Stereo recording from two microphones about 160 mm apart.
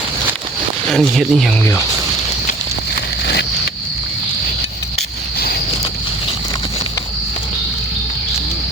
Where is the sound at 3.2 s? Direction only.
90° left.